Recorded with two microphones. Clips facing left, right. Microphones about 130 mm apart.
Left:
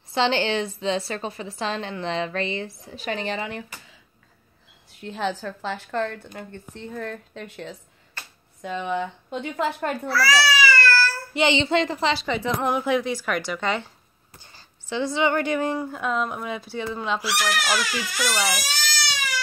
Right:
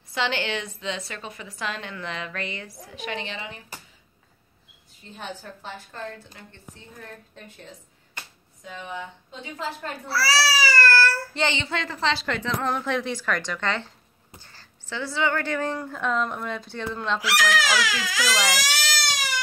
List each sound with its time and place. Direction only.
0.1 s a woman's voice: 30° left (ahead or behind)
4.9 s a woman's voice: 80° left
8.2 s a sound: 20° right (ahead or behind)
8.6 s speech: 65° left (ahead or behind)
10.1 s baby cry: 35° right (ahead or behind); by 11.1 s 55° right (ahead or behind)
11.3 s a woman's voice: 15° left (ahead or behind)
12.1 s a woman's voice: 5° left (ahead or behind)
17.2 s speech: 90° right; by 18.9 s 70° right (ahead or behind)